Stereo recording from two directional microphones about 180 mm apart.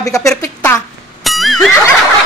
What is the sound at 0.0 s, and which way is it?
Speech, 20° left (ahead or behind).